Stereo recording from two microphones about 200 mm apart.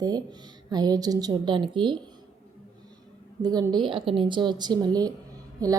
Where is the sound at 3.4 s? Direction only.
20° right (ahead or behind).